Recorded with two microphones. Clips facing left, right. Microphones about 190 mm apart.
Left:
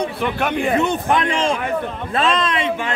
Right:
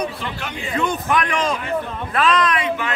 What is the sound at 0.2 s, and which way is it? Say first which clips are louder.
Speech: left 9 dB; 55° left (ahead or behind).